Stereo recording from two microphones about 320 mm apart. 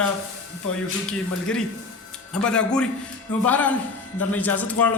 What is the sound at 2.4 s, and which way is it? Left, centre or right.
Speech, centre.